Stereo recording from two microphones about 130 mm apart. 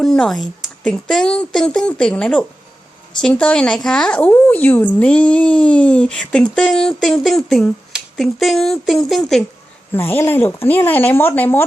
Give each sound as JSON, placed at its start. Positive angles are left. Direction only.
{"t": 0.0, "sound": "speech", "side_deg": 5}
{"t": 9.9, "sound": "speech", "side_deg": 15}